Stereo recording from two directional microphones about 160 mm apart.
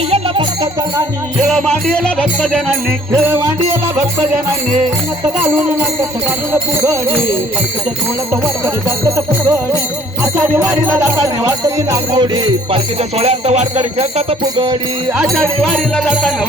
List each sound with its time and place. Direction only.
1.4 s music: centre (ahead or behind)
6.5 s music: 20° right (ahead or behind)
8.3 s music: 20° right (ahead or behind)
13.0 s music: 40° right (ahead or behind)
14.5 s music: 30° right (ahead or behind)
15.2 s music: centre (ahead or behind)